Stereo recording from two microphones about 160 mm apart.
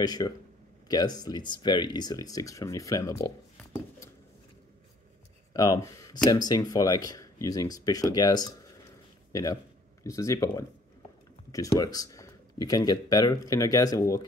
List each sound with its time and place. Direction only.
0.0 s speech: 25° left (ahead or behind)
5.5 s speech: 25° left (ahead or behind)